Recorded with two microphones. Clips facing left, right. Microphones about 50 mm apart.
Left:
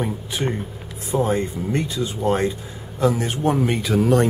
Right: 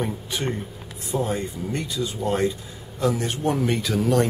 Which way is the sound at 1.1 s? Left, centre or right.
Left.